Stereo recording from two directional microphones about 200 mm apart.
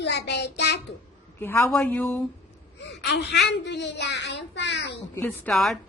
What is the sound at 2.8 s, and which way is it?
A child's voice, 60° left (ahead or behind).